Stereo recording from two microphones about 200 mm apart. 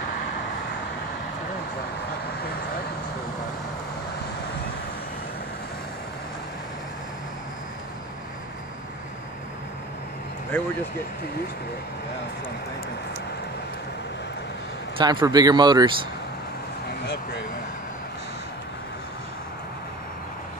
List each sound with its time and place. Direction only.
15.0 s speech: 20° right (ahead or behind)